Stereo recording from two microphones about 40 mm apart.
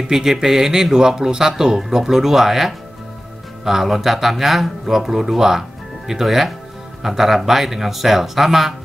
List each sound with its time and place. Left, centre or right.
0.1 s speech: centre